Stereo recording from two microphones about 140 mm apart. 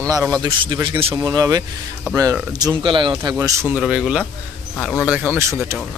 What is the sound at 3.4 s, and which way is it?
Speech, 20° right (ahead or behind).